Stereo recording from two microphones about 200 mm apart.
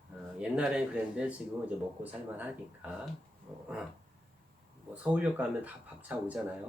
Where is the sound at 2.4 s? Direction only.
10° right (ahead or behind).